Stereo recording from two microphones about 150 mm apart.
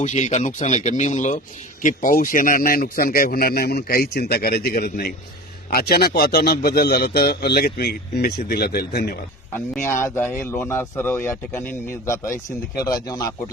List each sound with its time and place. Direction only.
0.0 s a man's voice: 50° left (ahead or behind); by 9.1 s 90° left
9.5 s speech: 15° left (ahead or behind)
12.8 s speech: 25° left (ahead or behind)